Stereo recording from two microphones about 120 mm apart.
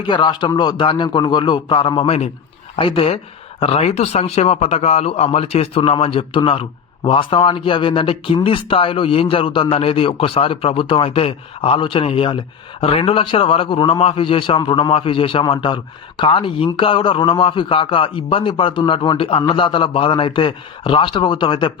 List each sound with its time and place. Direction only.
0.0 s a man's voice: 40° left (ahead or behind)